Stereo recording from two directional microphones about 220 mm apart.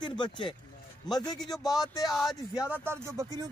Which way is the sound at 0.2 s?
20° left (ahead or behind).